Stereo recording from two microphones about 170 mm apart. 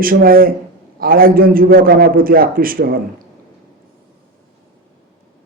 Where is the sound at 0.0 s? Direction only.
60° right (ahead or behind).